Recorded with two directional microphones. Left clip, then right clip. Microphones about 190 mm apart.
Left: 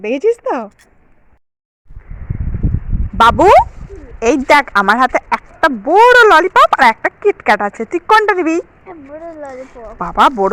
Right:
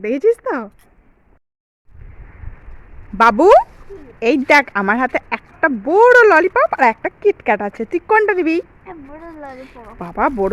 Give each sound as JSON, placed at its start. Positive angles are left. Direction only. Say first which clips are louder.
{"t": 0.0, "sound": "speech", "louder": "left 1 dB", "side_deg": -5}
{"t": 3.2, "sound": "a child's voice", "louder": "left 2 dB", "side_deg": -10}
{"t": 10.0, "sound": "speech", "louder": "left 7 dB", "side_deg": -5}